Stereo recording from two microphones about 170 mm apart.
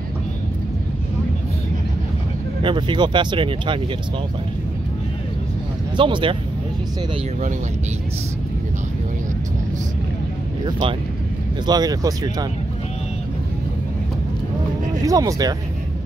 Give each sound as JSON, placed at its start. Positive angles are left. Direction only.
{"t": 2.6, "sound": "speech", "side_deg": -30}
{"t": 5.9, "sound": "speech", "side_deg": -30}
{"t": 10.6, "sound": "speech", "side_deg": -30}
{"t": 15.0, "sound": "speech", "side_deg": -20}